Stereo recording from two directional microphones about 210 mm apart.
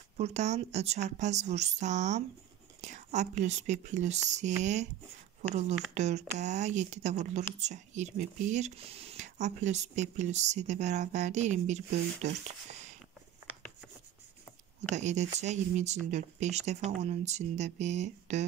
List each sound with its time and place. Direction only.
0.2 s speech: 30° right (ahead or behind)
14.9 s speech: 35° right (ahead or behind)